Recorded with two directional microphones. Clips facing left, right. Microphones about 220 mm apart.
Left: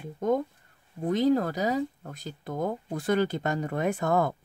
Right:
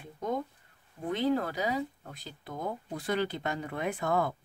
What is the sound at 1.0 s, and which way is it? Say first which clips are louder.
Speech: left 5 dB; 40° left (ahead or behind).